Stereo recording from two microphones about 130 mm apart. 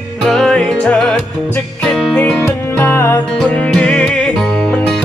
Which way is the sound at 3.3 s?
5° left (ahead or behind).